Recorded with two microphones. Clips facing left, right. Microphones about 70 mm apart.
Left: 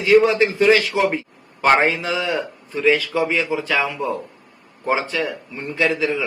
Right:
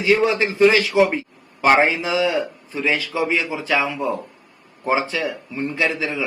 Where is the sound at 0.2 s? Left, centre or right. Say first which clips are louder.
Even; centre.